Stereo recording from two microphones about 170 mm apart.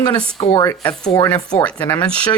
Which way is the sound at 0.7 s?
5° left (ahead or behind).